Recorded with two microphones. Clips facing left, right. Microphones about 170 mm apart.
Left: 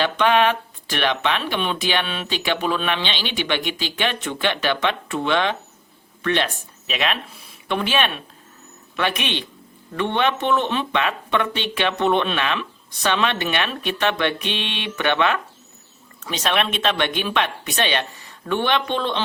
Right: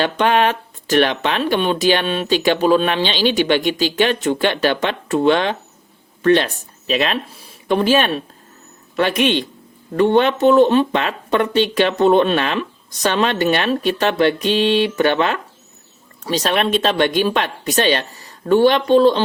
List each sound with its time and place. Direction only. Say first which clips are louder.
0.0 s speech: right 2 dB; 45° right (ahead or behind)